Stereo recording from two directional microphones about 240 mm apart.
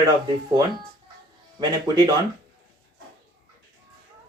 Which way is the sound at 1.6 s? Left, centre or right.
Centre.